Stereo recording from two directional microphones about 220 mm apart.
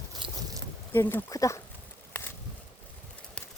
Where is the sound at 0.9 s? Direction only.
10° left (ahead or behind).